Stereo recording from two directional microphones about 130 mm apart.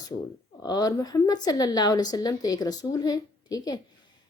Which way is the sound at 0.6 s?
30° left (ahead or behind).